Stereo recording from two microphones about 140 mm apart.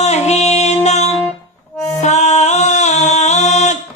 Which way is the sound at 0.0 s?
50° left (ahead or behind).